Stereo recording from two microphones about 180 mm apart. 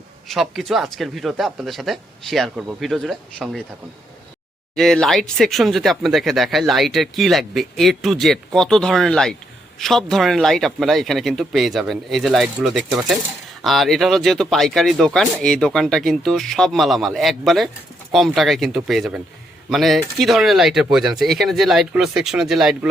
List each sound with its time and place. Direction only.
0.3 s speech: centre (ahead or behind)
4.7 s speech: centre (ahead or behind)